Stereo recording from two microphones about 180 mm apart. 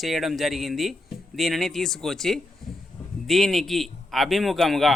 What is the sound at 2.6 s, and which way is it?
Hiccup, centre (ahead or behind).